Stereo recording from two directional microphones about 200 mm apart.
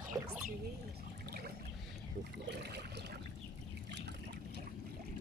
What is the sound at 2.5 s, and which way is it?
Boat, 55° right (ahead or behind).